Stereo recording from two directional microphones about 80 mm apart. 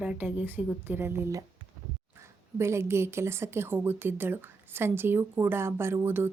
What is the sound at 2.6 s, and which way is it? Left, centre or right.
A woman's voice, right.